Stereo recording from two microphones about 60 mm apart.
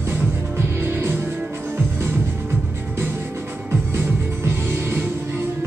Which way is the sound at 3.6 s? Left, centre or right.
Right.